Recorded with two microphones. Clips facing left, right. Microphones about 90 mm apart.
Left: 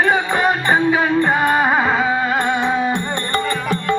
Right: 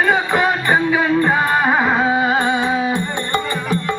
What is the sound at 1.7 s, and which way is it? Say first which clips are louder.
Music: right 1 dB; 5° right (ahead or behind).